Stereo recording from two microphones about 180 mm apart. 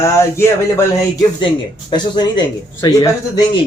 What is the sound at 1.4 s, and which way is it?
Speech, 25° left (ahead or behind).